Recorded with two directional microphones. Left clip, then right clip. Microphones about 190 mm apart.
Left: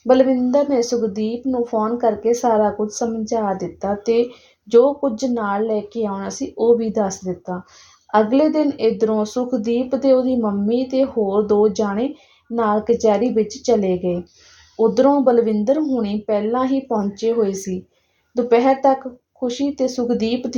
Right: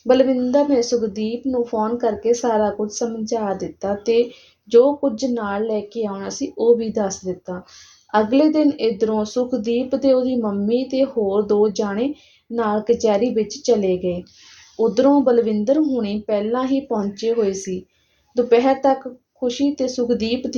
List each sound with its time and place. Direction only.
0.1 s a woman's voice: 30° left (ahead or behind)
18.3 s a woman's voice: 30° left (ahead or behind)